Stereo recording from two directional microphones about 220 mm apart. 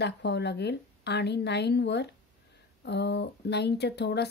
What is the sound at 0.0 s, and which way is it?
Speech, 50° left (ahead or behind).